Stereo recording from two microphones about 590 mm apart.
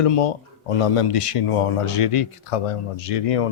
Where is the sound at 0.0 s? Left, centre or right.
Left.